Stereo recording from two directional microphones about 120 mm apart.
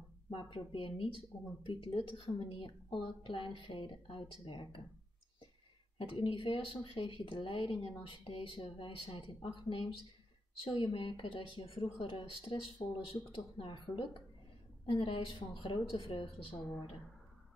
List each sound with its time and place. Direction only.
0.3 s speech: 45° left (ahead or behind)
5.9 s speech: 50° left (ahead or behind)